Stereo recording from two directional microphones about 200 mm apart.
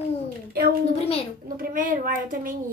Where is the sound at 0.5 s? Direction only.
50° right (ahead or behind).